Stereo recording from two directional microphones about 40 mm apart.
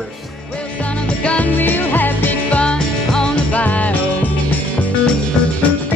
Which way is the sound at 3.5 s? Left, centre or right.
Left.